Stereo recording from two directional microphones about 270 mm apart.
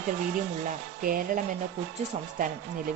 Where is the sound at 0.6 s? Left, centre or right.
Right.